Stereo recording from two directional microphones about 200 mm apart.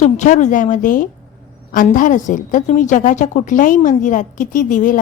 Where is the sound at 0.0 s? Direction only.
35° left (ahead or behind).